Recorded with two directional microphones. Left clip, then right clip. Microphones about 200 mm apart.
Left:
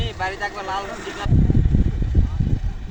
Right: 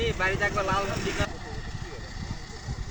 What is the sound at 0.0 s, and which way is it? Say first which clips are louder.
Vehicle: even; 20° left (ahead or behind).